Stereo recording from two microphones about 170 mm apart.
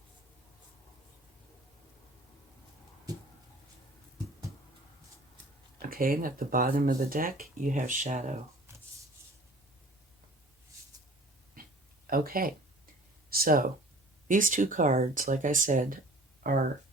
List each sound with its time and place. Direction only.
5.8 s speech: 55° right (ahead or behind)
12.0 s a sound: 60° right (ahead or behind)
13.3 s speech: 60° right (ahead or behind)